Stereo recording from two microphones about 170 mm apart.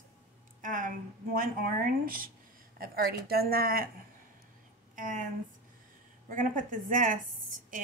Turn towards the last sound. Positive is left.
turn(degrees=-50)  # may be behind; listen again after turning